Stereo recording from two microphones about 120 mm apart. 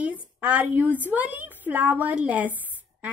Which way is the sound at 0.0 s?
10° right (ahead or behind).